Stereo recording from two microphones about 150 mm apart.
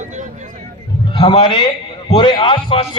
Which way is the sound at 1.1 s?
35° left (ahead or behind).